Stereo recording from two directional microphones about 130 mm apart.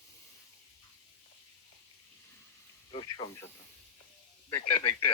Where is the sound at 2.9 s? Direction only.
40° left (ahead or behind).